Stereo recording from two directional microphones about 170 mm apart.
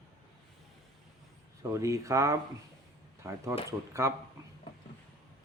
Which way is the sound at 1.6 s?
15° right (ahead or behind).